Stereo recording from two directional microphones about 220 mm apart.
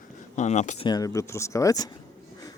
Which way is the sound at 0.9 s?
15° left (ahead or behind).